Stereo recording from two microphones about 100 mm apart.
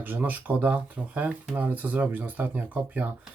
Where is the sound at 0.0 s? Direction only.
20° right (ahead or behind).